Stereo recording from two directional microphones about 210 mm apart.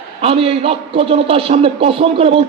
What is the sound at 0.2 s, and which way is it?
A man's voice, 30° right (ahead or behind).